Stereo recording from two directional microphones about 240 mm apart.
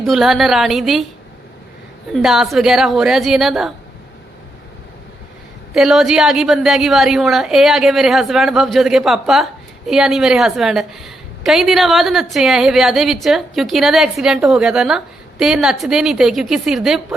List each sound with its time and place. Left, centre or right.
0.0 s a woman's voice: centre
2.1 s a woman's voice: centre
5.7 s a woman's voice: centre